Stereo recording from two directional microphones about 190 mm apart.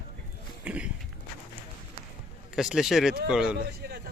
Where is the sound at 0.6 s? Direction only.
5° right (ahead or behind).